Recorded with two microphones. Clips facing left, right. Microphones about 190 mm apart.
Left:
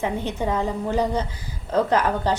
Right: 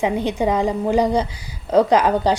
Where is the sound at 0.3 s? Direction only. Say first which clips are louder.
Right 5 dB; 15° right (ahead or behind).